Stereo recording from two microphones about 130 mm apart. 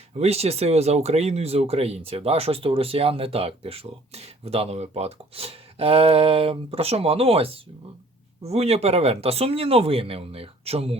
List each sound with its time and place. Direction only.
0.2 s speech: 50° right (ahead or behind)